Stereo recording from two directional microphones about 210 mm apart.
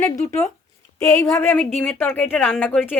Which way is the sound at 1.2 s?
10° left (ahead or behind).